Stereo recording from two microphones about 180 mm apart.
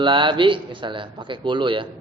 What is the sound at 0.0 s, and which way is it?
Speech, 25° right (ahead or behind).